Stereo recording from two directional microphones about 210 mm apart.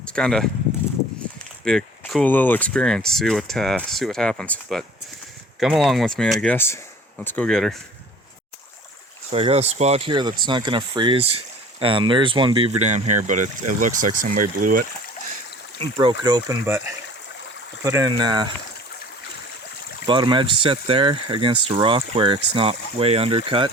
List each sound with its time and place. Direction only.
0.0 s speech: 5° left (ahead or behind)
1.6 s speech: centre (ahead or behind)
9.3 s speech: 30° right (ahead or behind)
15.8 s speech: 20° right (ahead or behind)
17.8 s speech: 15° right (ahead or behind)
20.1 s speech: 20° right (ahead or behind)